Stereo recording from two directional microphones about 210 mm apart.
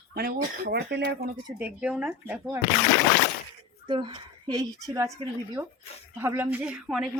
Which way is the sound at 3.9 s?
25° right (ahead or behind).